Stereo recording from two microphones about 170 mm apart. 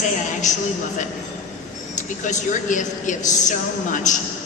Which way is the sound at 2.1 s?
50° left (ahead or behind).